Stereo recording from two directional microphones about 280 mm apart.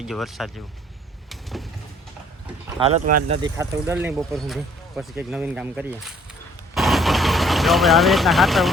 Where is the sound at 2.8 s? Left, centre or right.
Right.